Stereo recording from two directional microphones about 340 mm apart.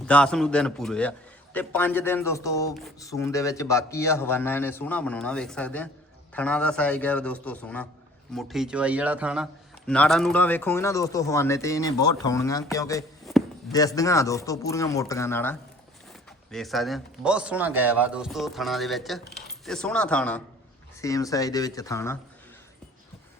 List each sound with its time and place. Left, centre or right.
0.0 s a man's voice: centre
12.7 s a sound: centre
13.7 s a man's voice: centre
19.2 s speech: left
19.6 s a man's voice: centre